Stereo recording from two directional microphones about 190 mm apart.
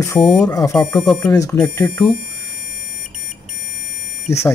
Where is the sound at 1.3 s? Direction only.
20° left (ahead or behind).